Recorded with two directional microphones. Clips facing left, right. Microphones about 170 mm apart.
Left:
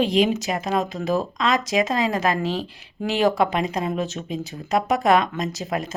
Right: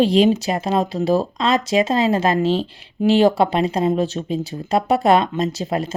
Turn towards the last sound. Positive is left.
turn(degrees=-30)  # may be behind; listen again after turning